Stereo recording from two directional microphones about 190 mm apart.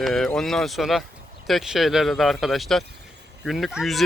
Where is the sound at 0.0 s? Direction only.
Centre (ahead or behind).